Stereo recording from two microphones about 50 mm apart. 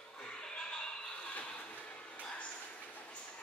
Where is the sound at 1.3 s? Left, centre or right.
Left.